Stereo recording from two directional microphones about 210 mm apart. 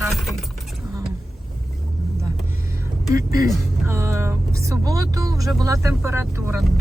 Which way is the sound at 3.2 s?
15° right (ahead or behind).